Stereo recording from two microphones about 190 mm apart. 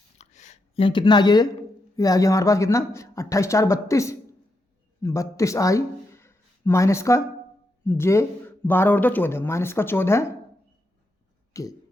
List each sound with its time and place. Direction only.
0.2 s a sound: 40° left (ahead or behind)
0.9 s speech: 25° left (ahead or behind)
11.5 s speech: 15° left (ahead or behind)